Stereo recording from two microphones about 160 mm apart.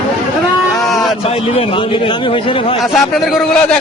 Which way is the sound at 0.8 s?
Centre (ahead or behind).